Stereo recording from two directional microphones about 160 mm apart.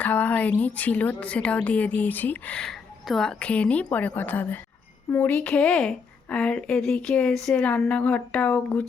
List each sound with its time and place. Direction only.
0.0 s a woman's voice: 10° left (ahead or behind)